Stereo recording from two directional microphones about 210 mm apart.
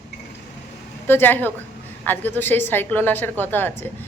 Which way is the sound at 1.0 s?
10° left (ahead or behind).